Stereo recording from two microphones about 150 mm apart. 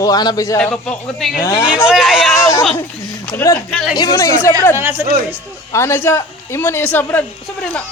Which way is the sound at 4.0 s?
25° left (ahead or behind).